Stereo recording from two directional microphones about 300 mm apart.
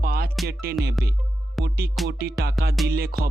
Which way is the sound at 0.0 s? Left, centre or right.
Right.